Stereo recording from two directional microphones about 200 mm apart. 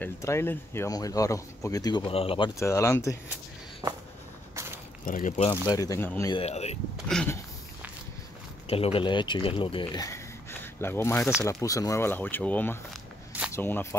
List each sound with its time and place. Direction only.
0.0 s speech: 15° left (ahead or behind)
2.6 s speech: 15° left (ahead or behind)
5.0 s speech: 40° left (ahead or behind)
5.5 s speech: 15° left (ahead or behind)
6.3 s speech: 30° left (ahead or behind)
7.1 s a sound: 5° left (ahead or behind)
8.6 s speech: 30° left (ahead or behind); by 13.8 s 10° left (ahead or behind)